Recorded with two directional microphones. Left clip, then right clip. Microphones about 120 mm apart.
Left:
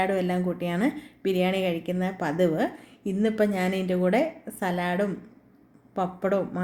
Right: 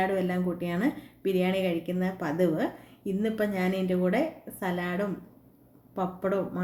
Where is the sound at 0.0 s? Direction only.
30° left (ahead or behind).